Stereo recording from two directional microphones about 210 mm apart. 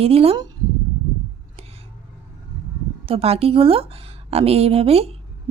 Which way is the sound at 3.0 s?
25° right (ahead or behind).